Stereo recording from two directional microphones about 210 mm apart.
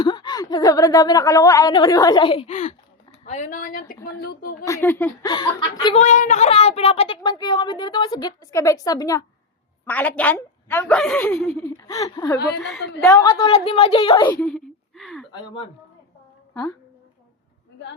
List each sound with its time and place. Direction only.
0.0 s speech: 20° left (ahead or behind); by 4.5 s 50° left (ahead or behind)
4.6 s a woman's voice: 10° left (ahead or behind)
5.3 s speech: 20° left (ahead or behind)
6.0 s a woman's voice: 35° left (ahead or behind); by 11.5 s 5° left (ahead or behind)
11.5 s speech: 15° left (ahead or behind)
12.5 s a woman's voice: centre (ahead or behind)
13.1 s a woman's voice: 15° left (ahead or behind)
13.4 s speech: 25° left (ahead or behind)
14.4 s speech: centre (ahead or behind)